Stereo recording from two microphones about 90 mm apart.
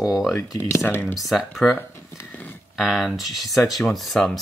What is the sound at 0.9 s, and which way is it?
Speech, 25° left (ahead or behind).